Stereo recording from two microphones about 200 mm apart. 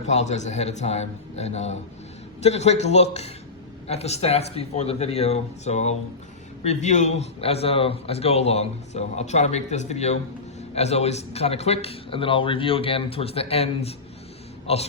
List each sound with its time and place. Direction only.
0.0 s a man's voice: 35° left (ahead or behind)